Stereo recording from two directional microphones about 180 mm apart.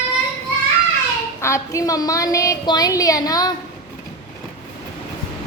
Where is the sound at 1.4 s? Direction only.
15° left (ahead or behind).